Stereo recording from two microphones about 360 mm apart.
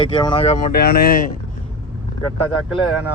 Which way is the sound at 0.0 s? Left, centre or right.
Centre.